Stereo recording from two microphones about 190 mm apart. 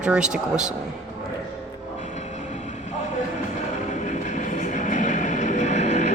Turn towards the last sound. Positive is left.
turn(degrees=35)  # may be behind; listen again after turning